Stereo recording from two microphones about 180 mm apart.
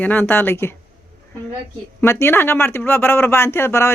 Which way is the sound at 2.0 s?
15° left (ahead or behind).